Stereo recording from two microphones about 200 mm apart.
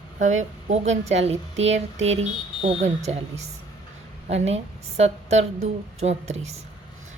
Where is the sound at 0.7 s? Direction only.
35° right (ahead or behind).